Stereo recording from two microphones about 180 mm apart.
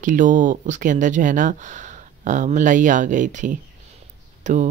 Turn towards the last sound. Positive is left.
turn(degrees=-45)  # may be behind; listen again after turning